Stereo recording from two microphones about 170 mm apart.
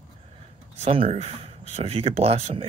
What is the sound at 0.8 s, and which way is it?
Speech, 35° right (ahead or behind).